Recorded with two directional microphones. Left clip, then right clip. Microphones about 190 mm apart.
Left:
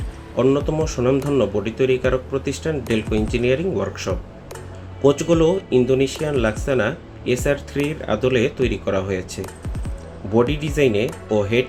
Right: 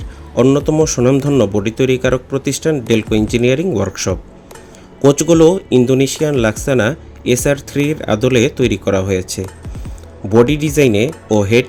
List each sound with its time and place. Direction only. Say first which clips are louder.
0.3 s speech: right 7 dB; 45° right (ahead or behind)